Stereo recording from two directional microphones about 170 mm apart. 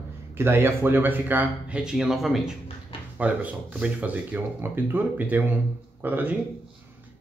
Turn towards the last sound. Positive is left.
turn(degrees=-10)  # may be behind; listen again after turning